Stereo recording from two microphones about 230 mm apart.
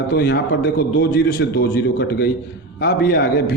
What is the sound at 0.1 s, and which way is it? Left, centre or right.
A man's voice, left.